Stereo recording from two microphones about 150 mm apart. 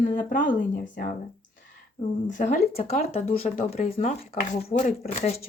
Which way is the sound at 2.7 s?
45° left (ahead or behind).